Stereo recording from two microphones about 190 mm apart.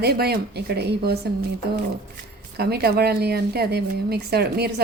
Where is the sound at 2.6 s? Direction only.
55° right (ahead or behind).